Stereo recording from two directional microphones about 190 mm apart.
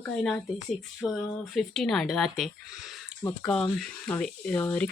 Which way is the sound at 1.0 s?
5° left (ahead or behind).